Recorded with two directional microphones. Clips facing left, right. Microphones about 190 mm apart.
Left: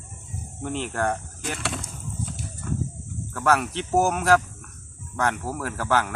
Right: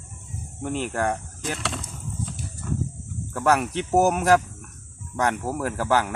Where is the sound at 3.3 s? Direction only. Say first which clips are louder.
Right 1 dB; 15° right (ahead or behind).